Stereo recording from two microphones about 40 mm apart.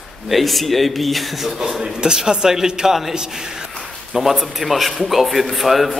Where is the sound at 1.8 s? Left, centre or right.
Centre.